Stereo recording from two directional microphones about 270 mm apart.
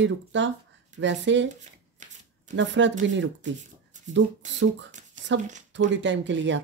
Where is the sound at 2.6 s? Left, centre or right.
Right.